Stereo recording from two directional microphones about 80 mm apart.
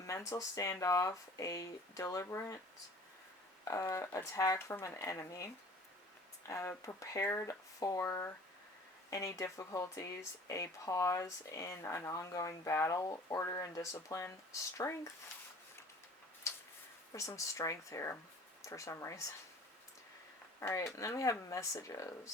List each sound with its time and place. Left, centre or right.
0.0 s speech: left
3.6 s speech: left
6.5 s speech: left
14.1 s speech: left
16.4 s a sound: left
17.1 s speech: left
20.6 s speech: left